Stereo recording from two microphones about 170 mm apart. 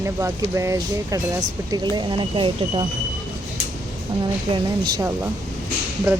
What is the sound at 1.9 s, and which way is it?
Speech, 30° right (ahead or behind).